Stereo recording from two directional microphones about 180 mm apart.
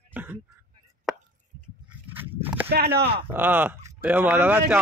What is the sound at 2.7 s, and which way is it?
Speech, 65° right (ahead or behind).